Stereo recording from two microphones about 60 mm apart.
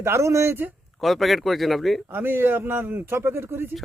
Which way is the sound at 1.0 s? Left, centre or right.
Centre.